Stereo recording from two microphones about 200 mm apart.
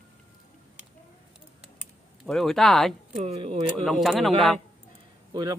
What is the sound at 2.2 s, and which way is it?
Speech, centre (ahead or behind).